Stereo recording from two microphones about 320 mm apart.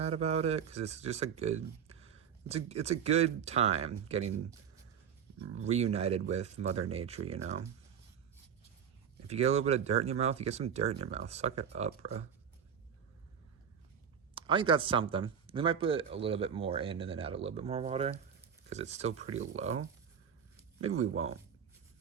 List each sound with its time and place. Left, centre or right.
0.0 s a man's voice: centre
5.5 s speech: right
9.2 s speech: centre
14.3 s speech: centre
20.8 s speech: right
21.1 s speech: right